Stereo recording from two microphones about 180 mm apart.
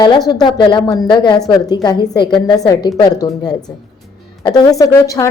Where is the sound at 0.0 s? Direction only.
25° left (ahead or behind).